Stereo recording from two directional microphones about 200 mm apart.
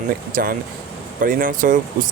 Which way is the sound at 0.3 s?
45° right (ahead or behind).